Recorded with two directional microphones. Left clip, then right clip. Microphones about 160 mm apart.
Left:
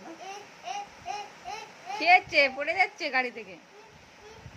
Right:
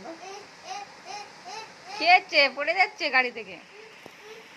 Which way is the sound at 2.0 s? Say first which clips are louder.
Right 2 dB; 20° left (ahead or behind).